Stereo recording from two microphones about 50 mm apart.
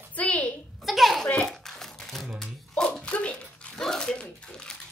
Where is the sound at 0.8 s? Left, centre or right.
Centre.